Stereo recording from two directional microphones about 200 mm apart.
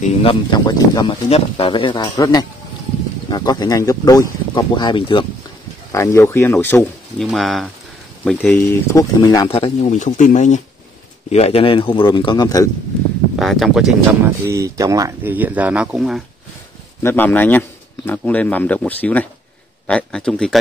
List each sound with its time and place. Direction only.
0.0 s speech: 25° left (ahead or behind)
5.9 s a man's voice: 15° left (ahead or behind)
13.4 s speech: centre (ahead or behind)
14.4 s speech: 15° right (ahead or behind)
17.0 s a man's voice: 10° left (ahead or behind)